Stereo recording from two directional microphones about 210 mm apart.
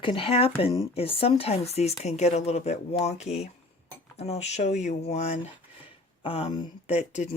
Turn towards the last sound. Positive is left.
turn(degrees=30)  # may be behind; listen again after turning